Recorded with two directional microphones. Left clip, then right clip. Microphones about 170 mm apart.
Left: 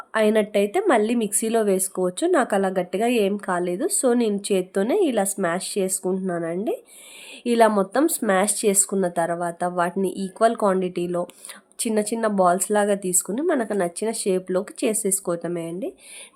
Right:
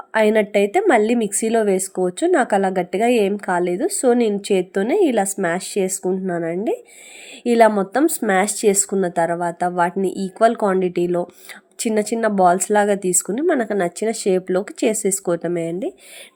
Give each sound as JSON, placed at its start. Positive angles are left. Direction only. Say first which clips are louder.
{"t": 0.1, "sound": "a woman's voice", "louder": "right 4 dB", "side_deg": -15}